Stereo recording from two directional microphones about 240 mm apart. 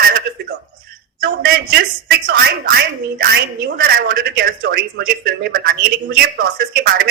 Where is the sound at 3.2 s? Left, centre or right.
Right.